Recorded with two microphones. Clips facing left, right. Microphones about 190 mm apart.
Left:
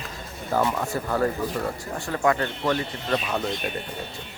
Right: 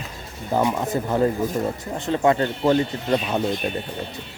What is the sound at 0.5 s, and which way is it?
Speech, 15° right (ahead or behind).